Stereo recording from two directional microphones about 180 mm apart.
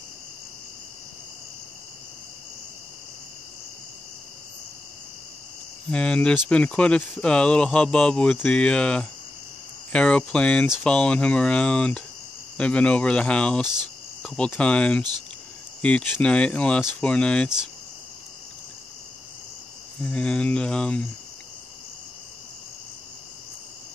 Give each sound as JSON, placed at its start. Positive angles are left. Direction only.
{"t": 5.9, "sound": "speech", "side_deg": 5}
{"t": 14.2, "sound": "cricket", "side_deg": 5}
{"t": 15.8, "sound": "speech", "side_deg": 5}
{"t": 20.0, "sound": "cricket", "side_deg": 5}